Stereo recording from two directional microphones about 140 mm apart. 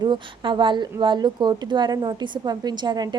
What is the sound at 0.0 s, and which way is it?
A woman's voice, 30° right (ahead or behind).